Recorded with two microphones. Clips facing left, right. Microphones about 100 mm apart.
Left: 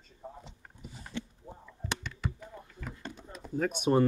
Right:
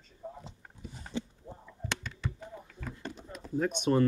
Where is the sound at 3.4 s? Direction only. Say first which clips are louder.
Right 1 dB; 5° left (ahead or behind).